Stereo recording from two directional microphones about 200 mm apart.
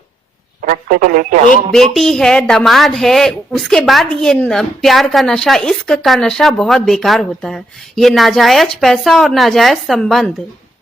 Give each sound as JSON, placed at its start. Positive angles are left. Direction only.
{"t": 0.6, "sound": "radio", "side_deg": -45}
{"t": 1.7, "sound": "a woman's voice", "side_deg": 0}